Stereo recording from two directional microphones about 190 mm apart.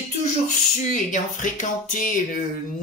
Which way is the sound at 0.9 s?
40° left (ahead or behind).